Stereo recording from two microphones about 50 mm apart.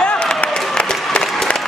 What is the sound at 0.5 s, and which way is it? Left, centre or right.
Applause, centre.